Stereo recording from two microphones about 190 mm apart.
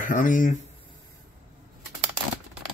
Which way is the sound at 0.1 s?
45° left (ahead or behind).